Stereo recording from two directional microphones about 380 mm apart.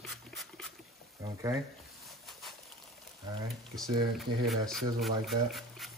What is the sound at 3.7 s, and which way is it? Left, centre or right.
Speech, centre.